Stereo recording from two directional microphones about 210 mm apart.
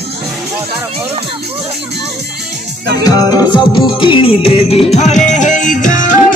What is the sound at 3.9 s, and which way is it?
Music, 25° left (ahead or behind).